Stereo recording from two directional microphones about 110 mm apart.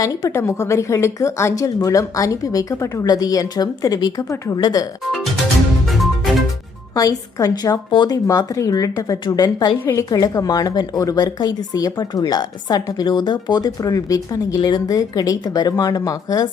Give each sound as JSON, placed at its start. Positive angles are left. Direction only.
{"t": 0.0, "sound": "a woman's voice", "side_deg": 30}
{"t": 5.9, "sound": "music", "side_deg": 0}
{"t": 6.9, "sound": "a woman's voice", "side_deg": 35}